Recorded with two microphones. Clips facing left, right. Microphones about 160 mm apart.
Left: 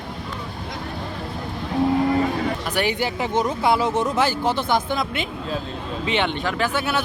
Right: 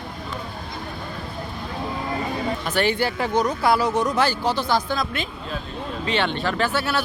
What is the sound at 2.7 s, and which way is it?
Speech, 15° left (ahead or behind).